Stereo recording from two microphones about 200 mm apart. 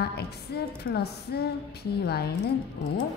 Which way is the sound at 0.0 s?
55° left (ahead or behind).